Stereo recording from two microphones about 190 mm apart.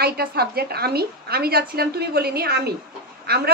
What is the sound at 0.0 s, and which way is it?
A woman's voice, 55° right (ahead or behind).